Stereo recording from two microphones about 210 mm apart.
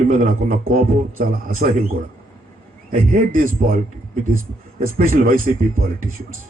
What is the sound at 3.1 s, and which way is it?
Speech, 40° right (ahead or behind).